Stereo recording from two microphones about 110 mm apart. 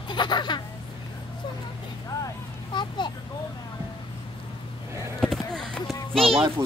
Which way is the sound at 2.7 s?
45° left (ahead or behind).